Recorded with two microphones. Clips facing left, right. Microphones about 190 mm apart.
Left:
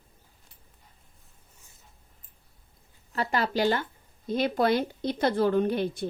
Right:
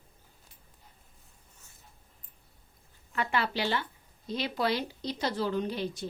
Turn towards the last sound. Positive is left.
turn(degrees=55)  # may be behind; listen again after turning